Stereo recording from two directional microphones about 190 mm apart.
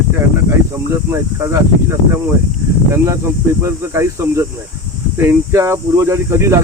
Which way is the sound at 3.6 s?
15° right (ahead or behind).